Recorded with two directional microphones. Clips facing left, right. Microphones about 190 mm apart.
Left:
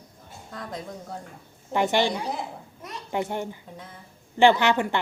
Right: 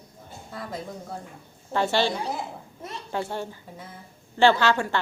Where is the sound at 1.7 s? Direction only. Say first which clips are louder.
Left 1 dB; 15° left (ahead or behind).